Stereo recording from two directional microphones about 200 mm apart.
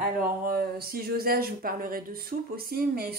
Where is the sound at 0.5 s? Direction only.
50° right (ahead or behind).